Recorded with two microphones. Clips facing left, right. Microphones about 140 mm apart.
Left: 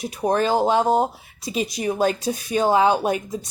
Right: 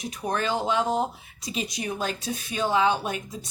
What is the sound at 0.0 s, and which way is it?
A woman's voice, 35° left (ahead or behind).